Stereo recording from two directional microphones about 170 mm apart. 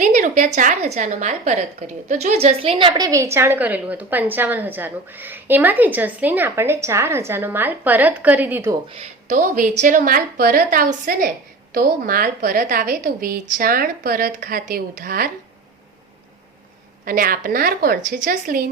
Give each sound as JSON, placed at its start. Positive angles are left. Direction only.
{"t": 0.0, "sound": "a woman's voice", "side_deg": -45}
{"t": 3.1, "sound": "a woman's voice", "side_deg": -15}
{"t": 9.3, "sound": "a woman's voice", "side_deg": -50}
{"t": 17.1, "sound": "a woman's voice", "side_deg": -55}